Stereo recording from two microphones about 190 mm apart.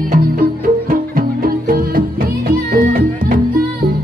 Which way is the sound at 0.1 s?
50° right (ahead or behind).